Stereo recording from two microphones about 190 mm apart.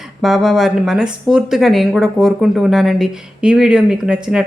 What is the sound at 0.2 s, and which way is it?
A woman's voice, centre (ahead or behind).